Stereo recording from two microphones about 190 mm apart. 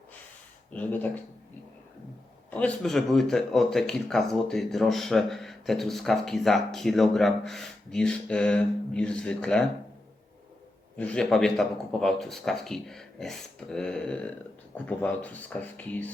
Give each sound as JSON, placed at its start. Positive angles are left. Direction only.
{"t": 0.7, "sound": "speech", "side_deg": 10}
{"t": 2.5, "sound": "speech", "side_deg": 5}
{"t": 10.9, "sound": "speech", "side_deg": 5}